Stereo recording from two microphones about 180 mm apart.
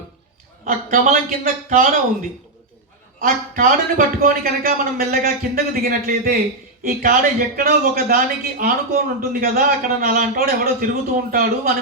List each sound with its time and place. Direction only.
0.6 s a man's voice: 50° right (ahead or behind)
3.2 s a man's voice: 50° right (ahead or behind)